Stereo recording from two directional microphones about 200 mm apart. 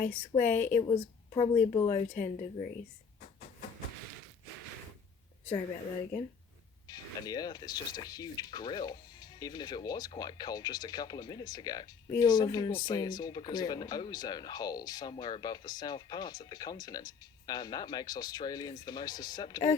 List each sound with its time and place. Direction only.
0.0 s speech: 40° left (ahead or behind)
0.5 s speech: 10° left (ahead or behind)
1.3 s speech: 30° left (ahead or behind)
6.8 s speech: 20° left (ahead or behind)